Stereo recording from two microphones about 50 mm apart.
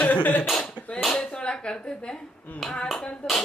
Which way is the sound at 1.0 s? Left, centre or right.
Centre.